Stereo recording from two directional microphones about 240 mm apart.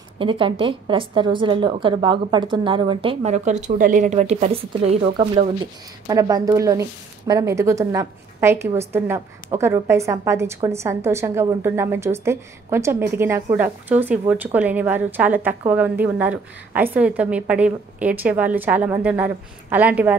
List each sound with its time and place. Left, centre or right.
0.2 s a woman's voice: right